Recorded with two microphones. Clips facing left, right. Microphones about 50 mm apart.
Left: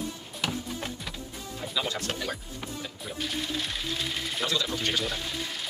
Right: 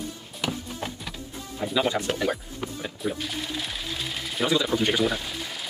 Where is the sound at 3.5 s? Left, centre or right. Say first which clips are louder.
Even; centre.